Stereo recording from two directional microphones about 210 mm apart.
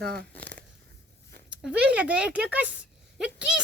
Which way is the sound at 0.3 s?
5° left (ahead or behind).